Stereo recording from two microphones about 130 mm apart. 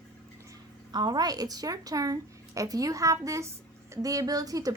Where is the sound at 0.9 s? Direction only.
30° right (ahead or behind).